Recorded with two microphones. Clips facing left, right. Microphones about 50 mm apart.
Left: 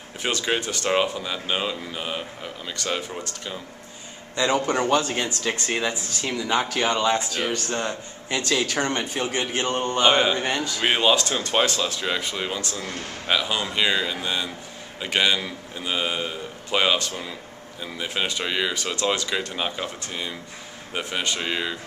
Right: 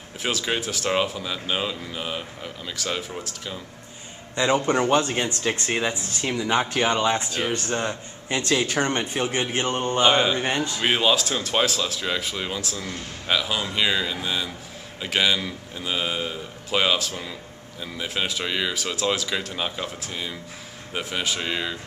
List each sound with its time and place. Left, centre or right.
0.2 s speech: centre
4.4 s a man's voice: right
9.7 s speech: centre
10.0 s speech: centre